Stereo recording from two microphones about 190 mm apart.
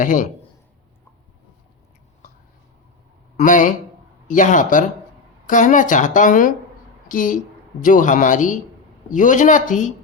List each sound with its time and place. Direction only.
0.0 s speech: 45° left (ahead or behind)
3.3 s speech: 45° left (ahead or behind)